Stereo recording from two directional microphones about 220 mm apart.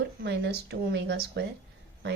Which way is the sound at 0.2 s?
50° right (ahead or behind).